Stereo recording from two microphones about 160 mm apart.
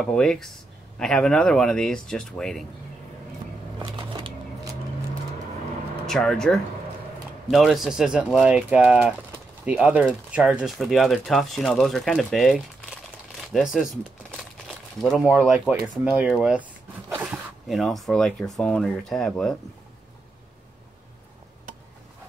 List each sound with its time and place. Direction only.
0.0 s speech: 5° left (ahead or behind)
6.0 s speech: 5° left (ahead or behind)
15.0 s speech: 5° left (ahead or behind)
15.2 s speech: 5° right (ahead or behind)
17.1 s a sound: 10° right (ahead or behind)
17.6 s speech: centre (ahead or behind)